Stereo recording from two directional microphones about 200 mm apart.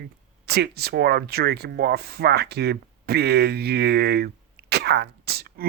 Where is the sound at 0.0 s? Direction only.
55° right (ahead or behind).